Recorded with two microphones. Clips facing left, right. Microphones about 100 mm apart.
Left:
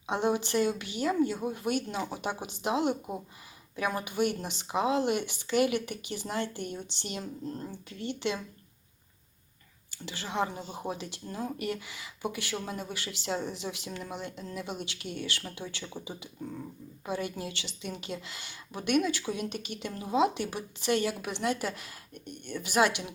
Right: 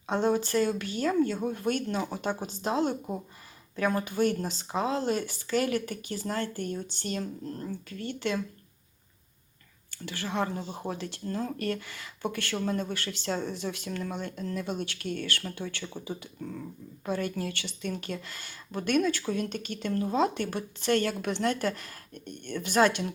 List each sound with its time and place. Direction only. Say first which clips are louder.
0.1 s speech: right 2 dB; 15° left (ahead or behind)
9.9 s speech: right 2 dB; 15° left (ahead or behind)